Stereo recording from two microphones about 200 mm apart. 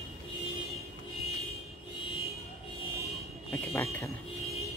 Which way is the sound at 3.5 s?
5° left (ahead or behind).